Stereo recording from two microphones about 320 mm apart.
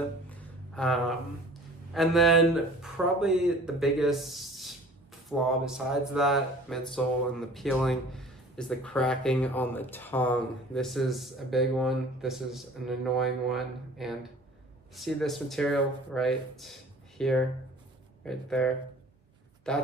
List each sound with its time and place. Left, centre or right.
0.7 s speech: centre